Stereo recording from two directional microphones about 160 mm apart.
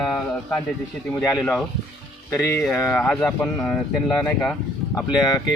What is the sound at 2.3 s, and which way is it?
Speech, 15° left (ahead or behind).